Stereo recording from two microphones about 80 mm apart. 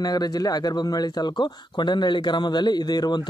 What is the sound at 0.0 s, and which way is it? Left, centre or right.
Speech, left.